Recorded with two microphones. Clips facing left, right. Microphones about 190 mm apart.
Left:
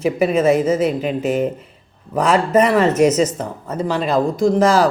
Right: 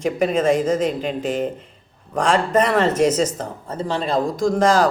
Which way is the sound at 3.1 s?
30° right (ahead or behind).